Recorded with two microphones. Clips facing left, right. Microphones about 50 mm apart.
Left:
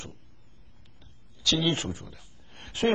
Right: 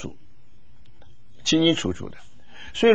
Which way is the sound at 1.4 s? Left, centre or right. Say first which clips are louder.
Right 7 dB; right.